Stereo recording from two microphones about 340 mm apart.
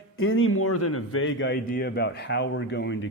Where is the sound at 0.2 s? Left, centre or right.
Left.